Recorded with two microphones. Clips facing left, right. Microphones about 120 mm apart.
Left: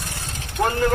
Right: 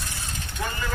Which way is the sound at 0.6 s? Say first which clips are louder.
Left 11 dB; 60° left (ahead or behind).